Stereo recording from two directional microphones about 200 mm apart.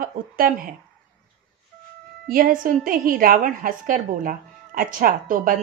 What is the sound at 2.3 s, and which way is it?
A woman's voice, 45° right (ahead or behind).